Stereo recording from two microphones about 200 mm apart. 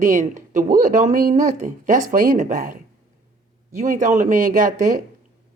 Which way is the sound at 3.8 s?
40° right (ahead or behind).